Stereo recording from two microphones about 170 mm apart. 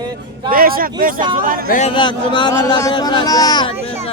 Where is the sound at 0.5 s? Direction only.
60° right (ahead or behind).